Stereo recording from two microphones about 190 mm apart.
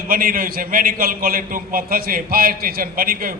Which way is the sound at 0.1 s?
50° right (ahead or behind).